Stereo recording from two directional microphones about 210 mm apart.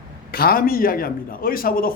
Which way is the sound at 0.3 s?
45° left (ahead or behind).